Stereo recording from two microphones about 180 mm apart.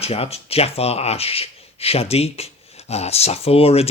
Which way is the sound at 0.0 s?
35° left (ahead or behind).